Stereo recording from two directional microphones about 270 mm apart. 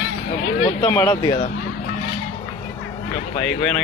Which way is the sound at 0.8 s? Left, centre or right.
Centre.